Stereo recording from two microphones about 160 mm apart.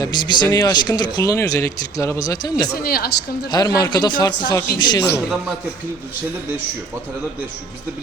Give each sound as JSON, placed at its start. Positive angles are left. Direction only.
{"t": 0.0, "sound": "speech", "side_deg": 25}
{"t": 2.8, "sound": "a woman's voice", "side_deg": 70}
{"t": 3.5, "sound": "speech", "side_deg": 25}